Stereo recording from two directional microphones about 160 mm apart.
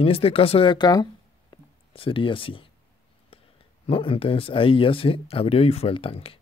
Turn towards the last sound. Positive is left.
turn(degrees=35)  # may be behind; listen again after turning